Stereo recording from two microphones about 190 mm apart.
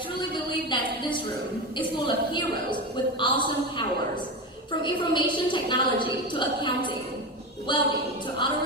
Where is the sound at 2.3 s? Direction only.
25° left (ahead or behind).